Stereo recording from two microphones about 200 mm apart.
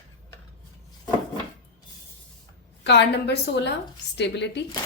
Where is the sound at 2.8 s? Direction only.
55° left (ahead or behind).